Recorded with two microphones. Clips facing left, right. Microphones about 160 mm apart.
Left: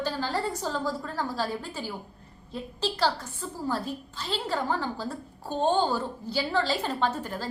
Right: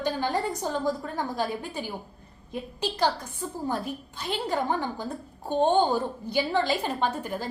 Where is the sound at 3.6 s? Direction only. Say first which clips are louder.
Left 1 dB; 15° right (ahead or behind).